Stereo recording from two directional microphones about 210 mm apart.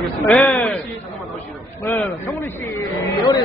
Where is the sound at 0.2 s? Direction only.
10° left (ahead or behind).